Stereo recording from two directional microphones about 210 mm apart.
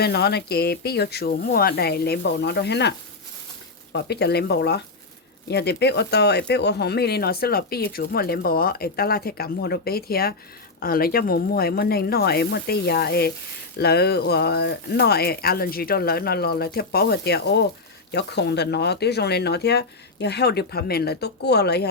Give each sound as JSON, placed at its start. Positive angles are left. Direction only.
{"t": 0.0, "sound": "speech", "side_deg": 50}
{"t": 3.9, "sound": "speech", "side_deg": 50}